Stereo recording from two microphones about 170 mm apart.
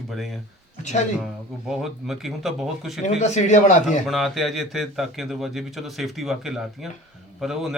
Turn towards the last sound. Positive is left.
turn(degrees=0)  # may be behind; listen again after turning